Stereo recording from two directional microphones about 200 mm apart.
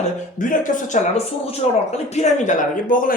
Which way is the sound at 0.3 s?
40° left (ahead or behind).